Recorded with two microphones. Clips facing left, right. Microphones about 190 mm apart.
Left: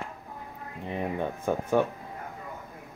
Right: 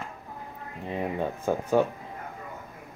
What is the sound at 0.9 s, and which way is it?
Speech, 15° right (ahead or behind).